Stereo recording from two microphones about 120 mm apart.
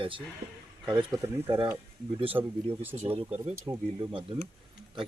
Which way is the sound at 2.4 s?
40° right (ahead or behind).